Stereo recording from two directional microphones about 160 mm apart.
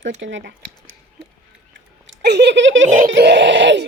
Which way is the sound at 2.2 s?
90° right.